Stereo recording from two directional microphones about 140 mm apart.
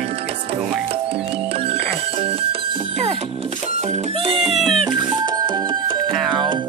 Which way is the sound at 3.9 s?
45° right (ahead or behind).